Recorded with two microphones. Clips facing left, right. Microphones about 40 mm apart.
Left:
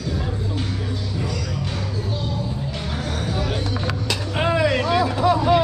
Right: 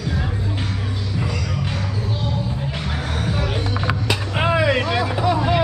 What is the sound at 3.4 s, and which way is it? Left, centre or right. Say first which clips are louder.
Vehicle: right 1 dB; right.